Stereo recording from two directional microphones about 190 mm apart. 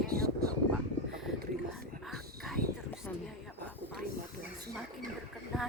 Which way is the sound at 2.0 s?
Centre (ahead or behind).